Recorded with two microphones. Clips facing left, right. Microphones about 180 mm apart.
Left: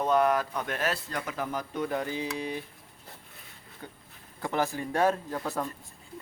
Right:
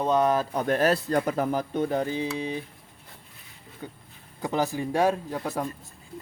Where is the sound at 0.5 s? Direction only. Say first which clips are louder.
Right 8 dB; 40° right (ahead or behind); by 2.6 s 20° right (ahead or behind).